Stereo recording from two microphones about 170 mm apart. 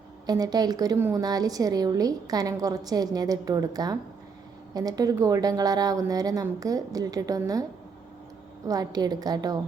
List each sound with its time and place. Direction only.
0.3 s a woman's voice: 25° right (ahead or behind)